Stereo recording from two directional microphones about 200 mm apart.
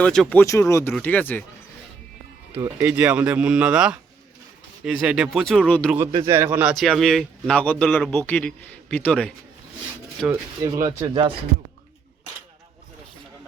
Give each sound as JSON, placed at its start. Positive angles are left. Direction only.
{"t": 0.0, "sound": "speech", "side_deg": 5}
{"t": 2.5, "sound": "speech", "side_deg": -15}
{"t": 2.7, "sound": "speech", "side_deg": -5}
{"t": 6.2, "sound": "speech", "side_deg": -10}
{"t": 10.6, "sound": "speech", "side_deg": -15}